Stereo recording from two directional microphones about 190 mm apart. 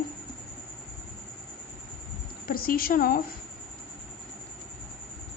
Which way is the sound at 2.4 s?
50° left (ahead or behind).